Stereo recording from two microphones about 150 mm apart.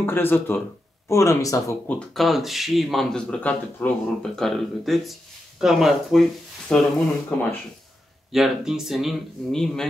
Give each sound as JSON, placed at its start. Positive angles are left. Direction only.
{"t": 0.0, "sound": "speech", "side_deg": 15}
{"t": 1.9, "sound": "speech", "side_deg": 5}